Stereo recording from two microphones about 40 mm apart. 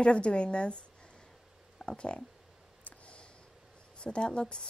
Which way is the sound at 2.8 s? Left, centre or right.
Left.